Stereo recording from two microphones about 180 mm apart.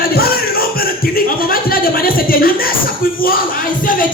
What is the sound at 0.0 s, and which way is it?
Speech, 55° left (ahead or behind).